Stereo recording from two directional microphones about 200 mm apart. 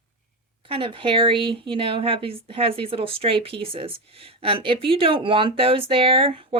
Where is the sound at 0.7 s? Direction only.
25° right (ahead or behind).